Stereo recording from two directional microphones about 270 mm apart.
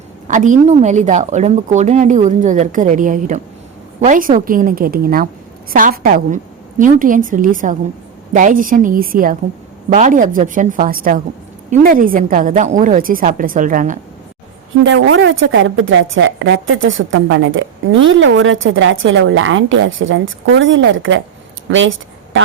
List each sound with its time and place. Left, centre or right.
0.3 s a woman's voice: right
14.8 s speech: right
21.7 s a sound: right